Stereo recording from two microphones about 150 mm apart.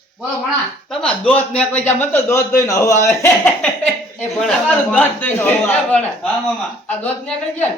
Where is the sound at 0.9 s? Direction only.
5° left (ahead or behind).